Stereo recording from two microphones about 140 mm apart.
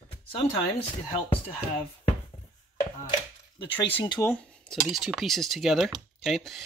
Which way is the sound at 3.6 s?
35° left (ahead or behind).